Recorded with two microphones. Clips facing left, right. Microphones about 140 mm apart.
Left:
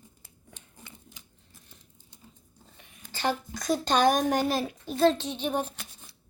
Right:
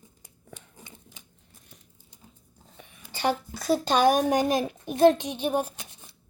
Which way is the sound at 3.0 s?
10° right (ahead or behind).